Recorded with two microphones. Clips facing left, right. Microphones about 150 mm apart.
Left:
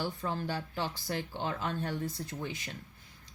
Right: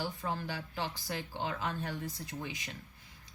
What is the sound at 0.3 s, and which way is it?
Speech, 50° left (ahead or behind).